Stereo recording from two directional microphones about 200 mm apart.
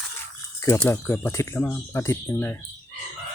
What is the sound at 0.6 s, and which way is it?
Speech, 10° left (ahead or behind).